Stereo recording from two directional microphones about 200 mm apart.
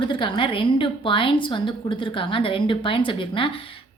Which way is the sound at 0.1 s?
25° left (ahead or behind).